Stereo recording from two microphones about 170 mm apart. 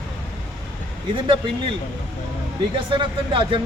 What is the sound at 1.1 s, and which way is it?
Speech, 30° right (ahead or behind).